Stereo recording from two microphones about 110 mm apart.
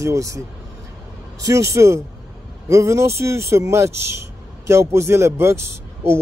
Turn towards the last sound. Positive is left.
turn(degrees=-25)  # may be behind; listen again after turning